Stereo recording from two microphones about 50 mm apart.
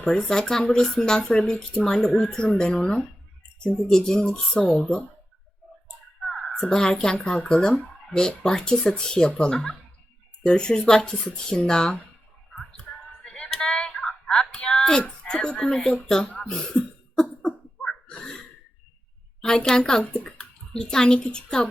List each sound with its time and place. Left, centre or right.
0.0 s speech: centre
3.8 s speech: centre
6.2 s a sound: centre
6.7 s speech: centre
13.2 s a sound: centre
15.2 s speech: centre
17.2 s cough: centre
19.5 s a child's voice: centre